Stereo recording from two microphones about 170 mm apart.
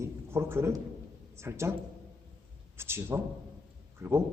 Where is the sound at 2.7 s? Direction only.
15° right (ahead or behind).